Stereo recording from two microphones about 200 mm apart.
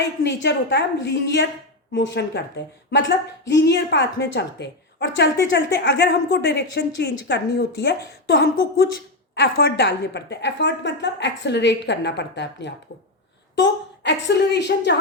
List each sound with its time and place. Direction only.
0.0 s a woman's voice: 60° left (ahead or behind)